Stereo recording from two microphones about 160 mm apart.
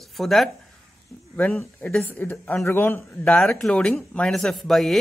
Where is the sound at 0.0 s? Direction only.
Centre (ahead or behind).